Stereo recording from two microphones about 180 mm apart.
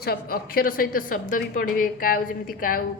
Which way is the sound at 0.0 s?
55° left (ahead or behind).